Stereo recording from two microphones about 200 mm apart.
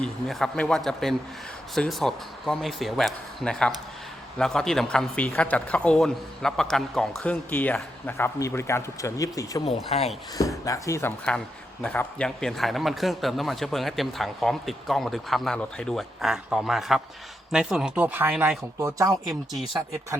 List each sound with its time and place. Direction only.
0.0 s a man's voice: centre (ahead or behind)
9.6 s speech: 30° left (ahead or behind)
10.7 s a man's voice: 15° left (ahead or behind); by 19.3 s 15° right (ahead or behind)